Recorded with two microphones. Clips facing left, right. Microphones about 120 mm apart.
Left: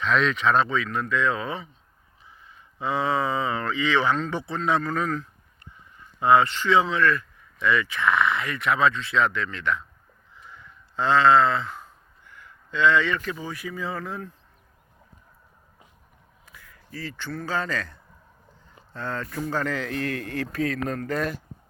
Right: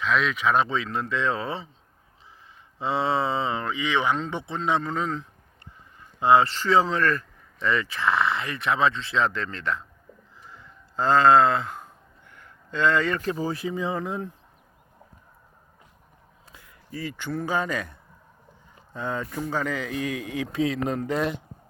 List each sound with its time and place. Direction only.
0.0 s speech: 5° right (ahead or behind)
0.7 s speech: 25° right (ahead or behind)
10.5 s a sound: 35° right (ahead or behind); by 14.3 s 20° right (ahead or behind)
16.5 s a man's voice: 20° right (ahead or behind)
18.9 s speech: 10° right (ahead or behind)